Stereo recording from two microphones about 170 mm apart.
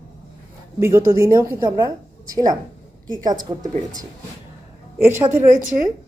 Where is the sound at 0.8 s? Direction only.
15° right (ahead or behind).